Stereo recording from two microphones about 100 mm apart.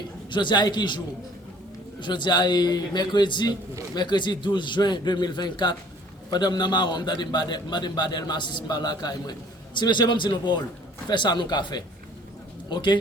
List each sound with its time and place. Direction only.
0.3 s a man's voice: 50° left (ahead or behind)